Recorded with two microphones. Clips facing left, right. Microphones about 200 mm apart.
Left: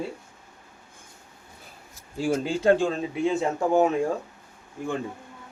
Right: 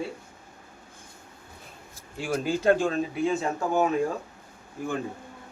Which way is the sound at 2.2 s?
30° left (ahead or behind).